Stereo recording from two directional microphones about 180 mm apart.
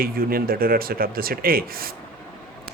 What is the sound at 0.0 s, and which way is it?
A man's voice, 55° right (ahead or behind).